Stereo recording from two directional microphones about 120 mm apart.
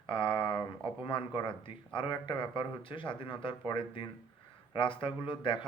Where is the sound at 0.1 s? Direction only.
45° left (ahead or behind).